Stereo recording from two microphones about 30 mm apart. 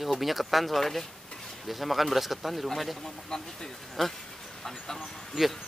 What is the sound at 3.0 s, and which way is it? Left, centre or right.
Speech, centre.